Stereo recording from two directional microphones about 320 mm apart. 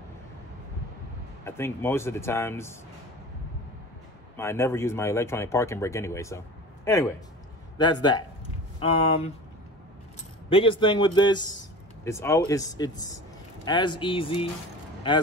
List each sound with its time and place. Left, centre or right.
1.4 s speech: centre
4.4 s speech: centre
10.5 s speech: centre